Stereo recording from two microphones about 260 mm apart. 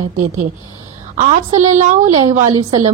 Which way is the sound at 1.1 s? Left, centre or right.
Right.